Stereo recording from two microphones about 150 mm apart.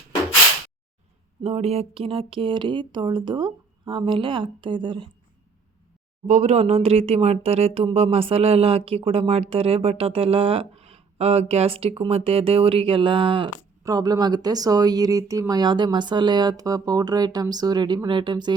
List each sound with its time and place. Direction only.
1.5 s speech: 40° right (ahead or behind)
6.2 s speech: 50° right (ahead or behind); by 18.5 s 30° right (ahead or behind)